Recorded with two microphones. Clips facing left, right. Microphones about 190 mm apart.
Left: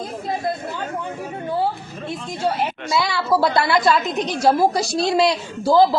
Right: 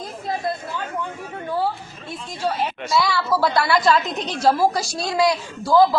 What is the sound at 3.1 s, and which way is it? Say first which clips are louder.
Speech: left 2 dB; 20° left (ahead or behind).